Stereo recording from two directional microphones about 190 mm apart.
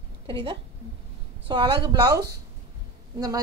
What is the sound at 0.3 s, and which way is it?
A woman's voice, 25° right (ahead or behind).